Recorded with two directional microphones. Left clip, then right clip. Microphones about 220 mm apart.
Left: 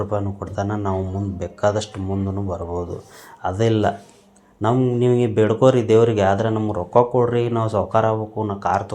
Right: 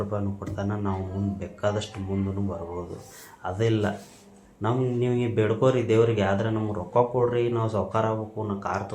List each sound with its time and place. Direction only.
0.1 s speech: 50° left (ahead or behind)